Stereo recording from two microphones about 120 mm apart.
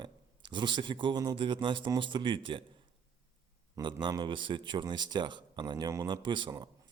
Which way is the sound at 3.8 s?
30° right (ahead or behind).